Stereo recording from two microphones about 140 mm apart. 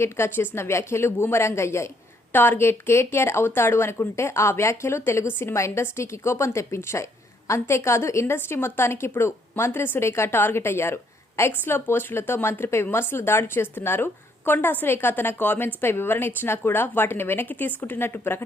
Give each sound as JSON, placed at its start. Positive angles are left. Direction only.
{"t": 0.0, "sound": "a woman's voice", "side_deg": 15}